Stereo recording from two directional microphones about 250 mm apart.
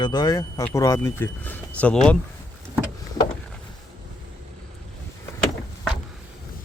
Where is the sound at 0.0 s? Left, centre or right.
Centre.